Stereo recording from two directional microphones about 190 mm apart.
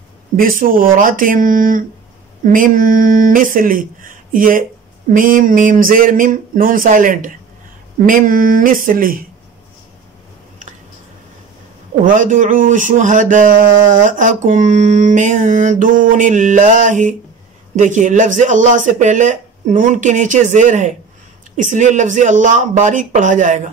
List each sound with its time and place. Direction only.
0.4 s speech: 45° right (ahead or behind)
12.2 s speech: 40° right (ahead or behind)